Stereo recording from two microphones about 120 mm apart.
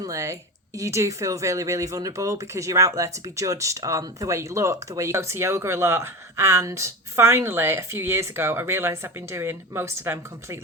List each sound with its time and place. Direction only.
0.0 s speech: 25° right (ahead or behind)